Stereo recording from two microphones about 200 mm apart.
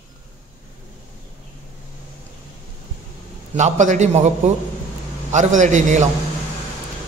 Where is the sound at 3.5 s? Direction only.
35° right (ahead or behind).